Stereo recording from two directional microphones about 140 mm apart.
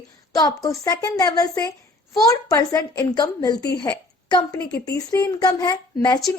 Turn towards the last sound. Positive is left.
turn(degrees=30)  # may be behind; listen again after turning